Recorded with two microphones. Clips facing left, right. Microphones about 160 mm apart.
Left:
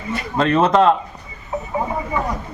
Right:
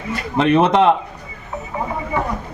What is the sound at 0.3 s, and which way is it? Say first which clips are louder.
Speech: right 1 dB; 15° right (ahead or behind).